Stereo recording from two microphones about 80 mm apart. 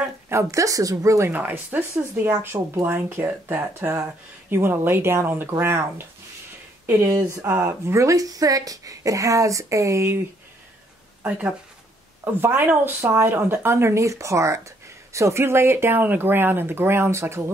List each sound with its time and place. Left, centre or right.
0.3 s speech: right
1.3 s speech: right
12.4 s speech: right